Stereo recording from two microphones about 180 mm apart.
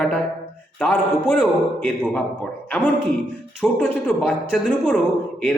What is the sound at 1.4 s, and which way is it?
Speech, 5° left (ahead or behind).